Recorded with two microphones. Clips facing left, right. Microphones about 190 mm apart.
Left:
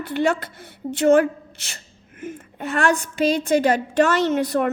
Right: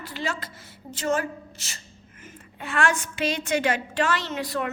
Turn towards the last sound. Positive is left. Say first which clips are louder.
# left 10 dB
turn(degrees=50)  # may be behind; listen again after turning